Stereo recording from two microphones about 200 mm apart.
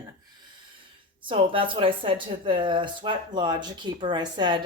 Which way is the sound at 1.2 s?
25° right (ahead or behind).